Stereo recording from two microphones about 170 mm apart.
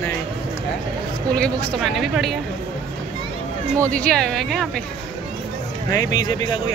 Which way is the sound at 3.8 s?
10° left (ahead or behind).